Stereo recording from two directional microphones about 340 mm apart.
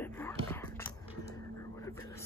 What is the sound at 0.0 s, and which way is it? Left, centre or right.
Whispering, centre.